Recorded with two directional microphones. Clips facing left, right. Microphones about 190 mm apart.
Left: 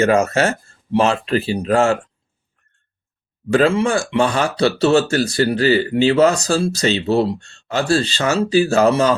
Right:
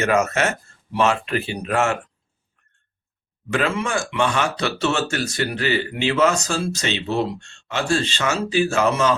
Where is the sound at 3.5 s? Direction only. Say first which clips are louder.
Left 7 dB; 35° left (ahead or behind).